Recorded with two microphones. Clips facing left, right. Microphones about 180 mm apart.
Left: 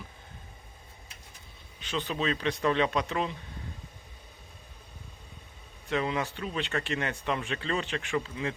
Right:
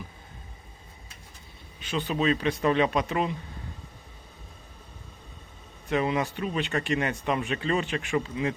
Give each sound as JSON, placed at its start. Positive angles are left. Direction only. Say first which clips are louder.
{"t": 2.0, "sound": "speech", "louder": "right 5 dB", "side_deg": -15}
{"t": 5.9, "sound": "speech", "louder": "right 4 dB", "side_deg": -15}